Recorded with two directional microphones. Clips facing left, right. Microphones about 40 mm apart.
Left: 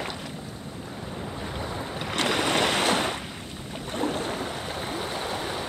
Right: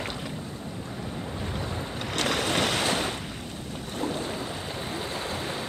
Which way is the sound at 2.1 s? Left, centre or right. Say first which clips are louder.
Left 2 dB; centre.